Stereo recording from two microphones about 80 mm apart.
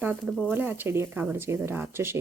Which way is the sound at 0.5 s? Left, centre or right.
Right.